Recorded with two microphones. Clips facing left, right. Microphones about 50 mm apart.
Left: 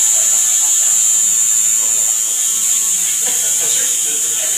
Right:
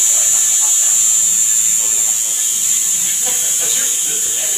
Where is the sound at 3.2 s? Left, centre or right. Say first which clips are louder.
Even; centre.